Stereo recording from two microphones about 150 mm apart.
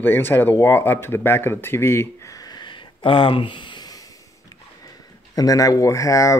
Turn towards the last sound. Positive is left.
turn(degrees=20)  # may be behind; listen again after turning